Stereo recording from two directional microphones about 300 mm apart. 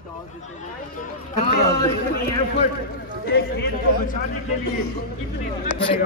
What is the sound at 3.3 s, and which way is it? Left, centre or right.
Speech, left.